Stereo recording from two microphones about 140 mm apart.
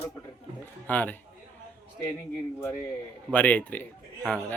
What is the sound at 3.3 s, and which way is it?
Speech, 10° left (ahead or behind).